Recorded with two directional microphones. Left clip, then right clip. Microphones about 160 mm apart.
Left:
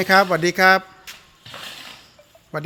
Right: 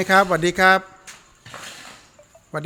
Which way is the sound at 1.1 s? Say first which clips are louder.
Left 3 dB; 20° left (ahead or behind).